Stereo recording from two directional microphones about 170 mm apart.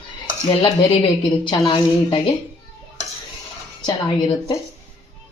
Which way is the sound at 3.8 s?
30° left (ahead or behind).